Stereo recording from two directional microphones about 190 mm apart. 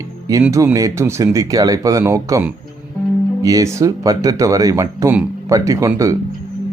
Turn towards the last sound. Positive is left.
turn(degrees=-15)  # may be behind; listen again after turning